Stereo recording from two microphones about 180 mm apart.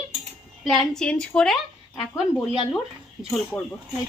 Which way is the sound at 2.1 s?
20° left (ahead or behind).